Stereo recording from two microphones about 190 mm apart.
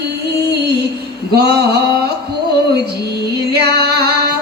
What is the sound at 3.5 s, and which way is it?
Female singing, 55° right (ahead or behind).